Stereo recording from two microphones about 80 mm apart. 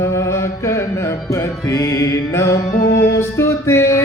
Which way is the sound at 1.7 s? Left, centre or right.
Left.